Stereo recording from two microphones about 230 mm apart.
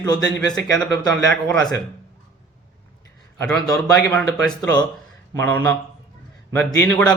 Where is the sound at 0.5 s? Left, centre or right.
Centre.